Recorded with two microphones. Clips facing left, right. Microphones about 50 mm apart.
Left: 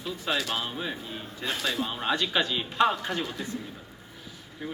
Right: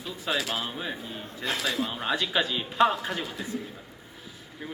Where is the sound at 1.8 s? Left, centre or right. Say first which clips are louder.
Even; centre.